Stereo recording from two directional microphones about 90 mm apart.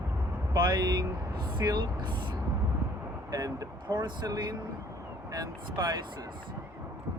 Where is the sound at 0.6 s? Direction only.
50° right (ahead or behind).